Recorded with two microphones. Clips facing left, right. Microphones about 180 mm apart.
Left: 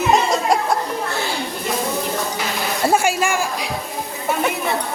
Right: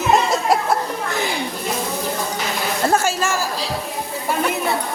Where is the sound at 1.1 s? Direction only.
15° right (ahead or behind).